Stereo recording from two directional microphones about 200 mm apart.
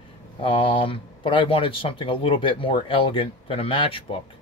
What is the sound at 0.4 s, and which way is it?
A man's voice, 25° left (ahead or behind).